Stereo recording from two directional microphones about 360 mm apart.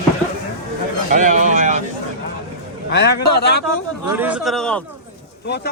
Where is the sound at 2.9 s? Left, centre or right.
Left.